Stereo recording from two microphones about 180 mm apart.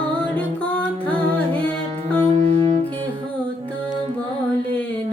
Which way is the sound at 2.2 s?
30° right (ahead or behind).